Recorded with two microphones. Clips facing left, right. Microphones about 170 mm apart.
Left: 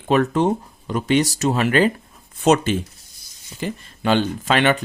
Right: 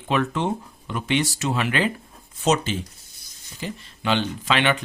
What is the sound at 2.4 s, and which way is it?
Speech, 55° left (ahead or behind).